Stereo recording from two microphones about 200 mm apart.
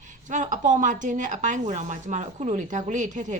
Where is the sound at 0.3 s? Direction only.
40° right (ahead or behind).